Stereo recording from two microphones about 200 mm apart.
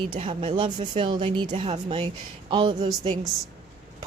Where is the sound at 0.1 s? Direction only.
25° right (ahead or behind).